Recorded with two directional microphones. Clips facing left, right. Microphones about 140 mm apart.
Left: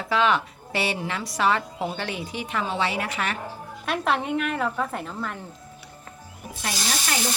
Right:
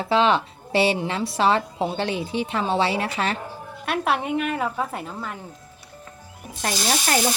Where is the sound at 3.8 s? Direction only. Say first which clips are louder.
Right 1 dB; 5° right (ahead or behind).